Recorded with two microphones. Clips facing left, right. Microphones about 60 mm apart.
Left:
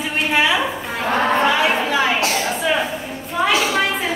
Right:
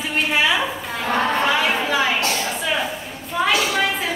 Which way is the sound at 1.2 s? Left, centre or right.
Centre.